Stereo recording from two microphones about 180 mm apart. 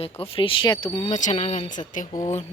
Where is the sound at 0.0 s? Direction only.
30° left (ahead or behind).